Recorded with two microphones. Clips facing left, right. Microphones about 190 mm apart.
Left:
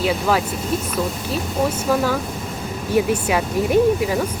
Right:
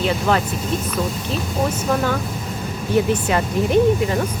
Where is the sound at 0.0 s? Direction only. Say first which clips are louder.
Even; 5° left (ahead or behind).